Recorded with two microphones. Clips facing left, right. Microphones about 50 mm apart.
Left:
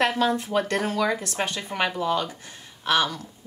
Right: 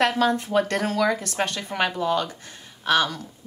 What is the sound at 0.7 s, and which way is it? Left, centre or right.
A woman's voice, centre.